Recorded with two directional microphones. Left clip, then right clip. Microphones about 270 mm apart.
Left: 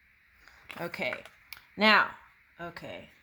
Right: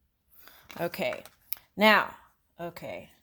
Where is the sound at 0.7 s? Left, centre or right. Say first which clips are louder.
Right 3 dB; right.